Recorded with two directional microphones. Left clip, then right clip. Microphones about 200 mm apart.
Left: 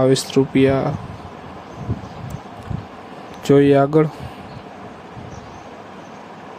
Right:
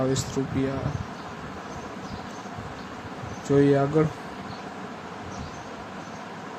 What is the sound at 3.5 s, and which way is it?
Speech, 45° left (ahead or behind).